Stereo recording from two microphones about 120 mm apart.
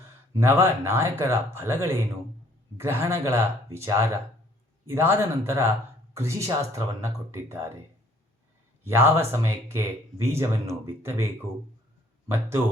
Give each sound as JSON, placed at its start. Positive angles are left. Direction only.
{"t": 0.3, "sound": "speech", "side_deg": -20}
{"t": 8.8, "sound": "speech", "side_deg": -20}